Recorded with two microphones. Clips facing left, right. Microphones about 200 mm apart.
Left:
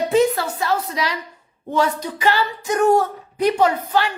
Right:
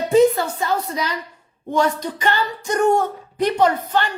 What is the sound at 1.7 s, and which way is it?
A woman's voice, 10° left (ahead or behind).